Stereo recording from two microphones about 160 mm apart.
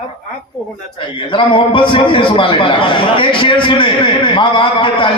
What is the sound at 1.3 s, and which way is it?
A man's voice, 30° left (ahead or behind).